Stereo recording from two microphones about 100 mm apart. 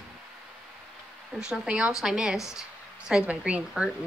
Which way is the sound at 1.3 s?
5° right (ahead or behind).